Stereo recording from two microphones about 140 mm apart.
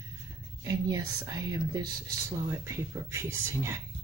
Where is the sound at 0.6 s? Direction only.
25° right (ahead or behind).